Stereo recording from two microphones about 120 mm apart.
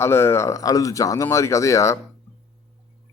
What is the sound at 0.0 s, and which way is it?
A man's voice, 20° left (ahead or behind).